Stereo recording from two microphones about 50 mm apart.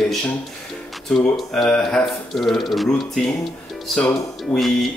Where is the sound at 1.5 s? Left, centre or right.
Centre.